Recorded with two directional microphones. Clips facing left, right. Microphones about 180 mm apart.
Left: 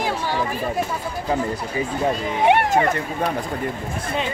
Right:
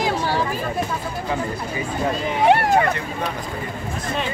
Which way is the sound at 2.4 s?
20° left (ahead or behind).